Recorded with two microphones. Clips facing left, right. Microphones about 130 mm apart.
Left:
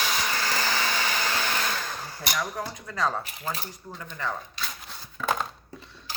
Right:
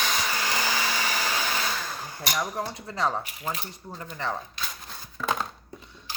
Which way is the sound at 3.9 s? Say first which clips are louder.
Right 1 dB; 30° right (ahead or behind).